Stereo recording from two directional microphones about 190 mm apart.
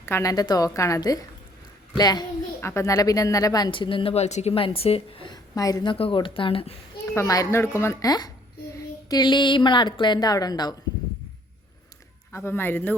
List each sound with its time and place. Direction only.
0.0 s a child's voice: 15° left (ahead or behind)
7.0 s a child's voice: 15° left (ahead or behind)
12.3 s a child's voice: 10° left (ahead or behind)